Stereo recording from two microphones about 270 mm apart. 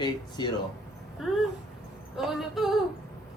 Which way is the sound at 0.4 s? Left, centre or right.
Centre.